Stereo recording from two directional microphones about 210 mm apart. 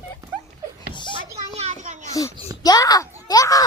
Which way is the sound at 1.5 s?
35° right (ahead or behind).